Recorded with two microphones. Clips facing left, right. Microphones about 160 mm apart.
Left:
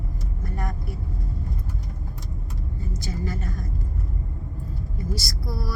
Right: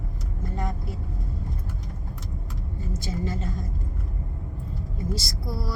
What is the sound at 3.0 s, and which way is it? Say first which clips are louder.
Speech: right 1 dB; 25° right (ahead or behind).